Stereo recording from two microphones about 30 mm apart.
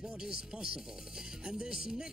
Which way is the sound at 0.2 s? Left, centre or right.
Right.